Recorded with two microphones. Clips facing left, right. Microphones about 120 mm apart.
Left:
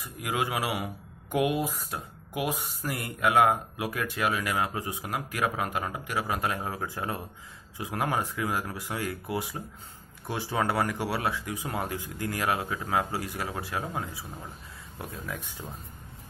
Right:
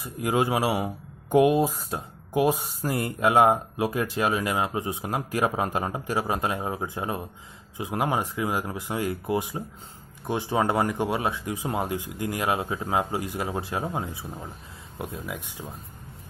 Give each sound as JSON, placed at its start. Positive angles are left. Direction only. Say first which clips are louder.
{"t": 0.0, "sound": "speech", "louder": "right 6 dB", "side_deg": -30}